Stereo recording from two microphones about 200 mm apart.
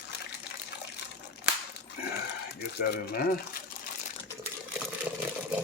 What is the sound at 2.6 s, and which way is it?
Speech, 55° left (ahead or behind).